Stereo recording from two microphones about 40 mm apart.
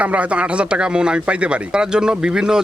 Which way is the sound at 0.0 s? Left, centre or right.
Right.